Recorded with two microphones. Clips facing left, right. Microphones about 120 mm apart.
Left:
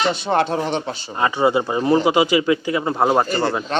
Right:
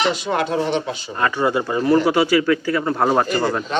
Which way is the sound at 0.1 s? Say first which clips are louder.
Left 2 dB; 30° left (ahead or behind).